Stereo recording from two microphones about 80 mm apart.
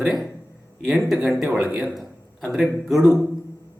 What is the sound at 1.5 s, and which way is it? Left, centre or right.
Speech, centre.